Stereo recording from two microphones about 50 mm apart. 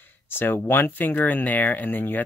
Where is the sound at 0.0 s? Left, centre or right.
Left.